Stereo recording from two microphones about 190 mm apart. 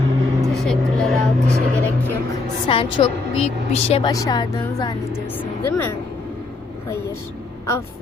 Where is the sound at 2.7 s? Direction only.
25° left (ahead or behind).